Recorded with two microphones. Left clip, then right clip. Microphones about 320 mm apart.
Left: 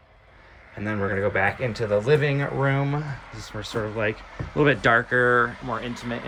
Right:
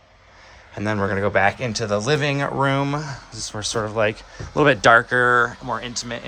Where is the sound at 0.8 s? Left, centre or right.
Centre.